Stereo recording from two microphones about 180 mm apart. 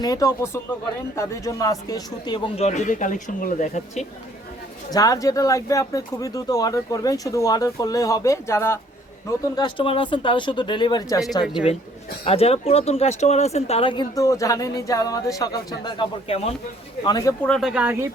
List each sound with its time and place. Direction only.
0.0 s speech: 20° left (ahead or behind)
2.6 s speech: 45° left (ahead or behind)
4.9 s speech: 20° left (ahead or behind)
9.6 s speech: 25° left (ahead or behind)
12.2 s speech: 35° left (ahead or behind)
17.0 s speech: 20° left (ahead or behind)
17.4 s speech: centre (ahead or behind)